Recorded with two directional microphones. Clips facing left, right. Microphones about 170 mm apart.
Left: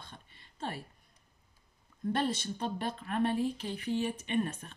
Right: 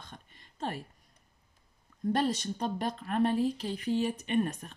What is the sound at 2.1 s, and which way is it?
Speech, 40° right (ahead or behind).